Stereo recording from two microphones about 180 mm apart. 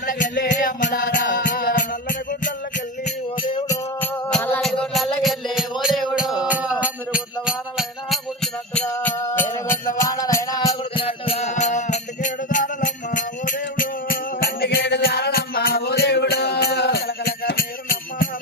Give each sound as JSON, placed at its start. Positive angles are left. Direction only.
{"t": 0.3, "sound": "music", "side_deg": 75}
{"t": 0.6, "sound": "music", "side_deg": 45}
{"t": 4.3, "sound": "music", "side_deg": 5}